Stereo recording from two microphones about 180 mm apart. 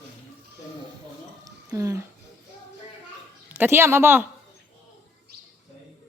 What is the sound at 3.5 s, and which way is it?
Speech, 10° right (ahead or behind).